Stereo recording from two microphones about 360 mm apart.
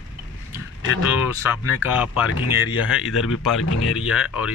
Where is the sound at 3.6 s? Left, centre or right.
Left.